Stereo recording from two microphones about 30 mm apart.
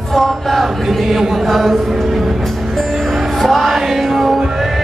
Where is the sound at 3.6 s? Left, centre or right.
Centre.